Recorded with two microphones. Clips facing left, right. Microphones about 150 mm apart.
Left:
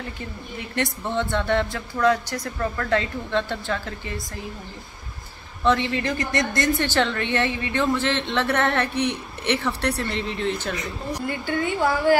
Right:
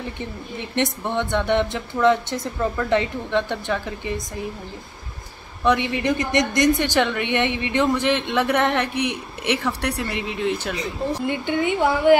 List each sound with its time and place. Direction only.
0.2 s a woman's voice: 20° right (ahead or behind)
5.6 s a woman's voice: 15° right (ahead or behind)
10.8 s a woman's voice: 25° right (ahead or behind)